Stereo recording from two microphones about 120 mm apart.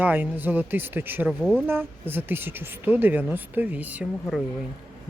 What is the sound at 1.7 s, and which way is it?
Speech, 20° right (ahead or behind).